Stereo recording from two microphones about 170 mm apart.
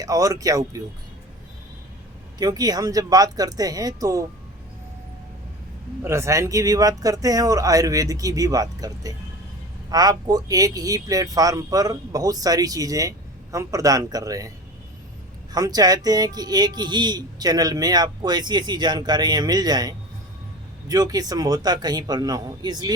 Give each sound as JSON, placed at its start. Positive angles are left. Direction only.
{"t": 0.0, "sound": "speech", "side_deg": -20}
{"t": 2.4, "sound": "speech", "side_deg": -20}
{"t": 6.0, "sound": "speech", "side_deg": -15}
{"t": 15.5, "sound": "speech", "side_deg": -20}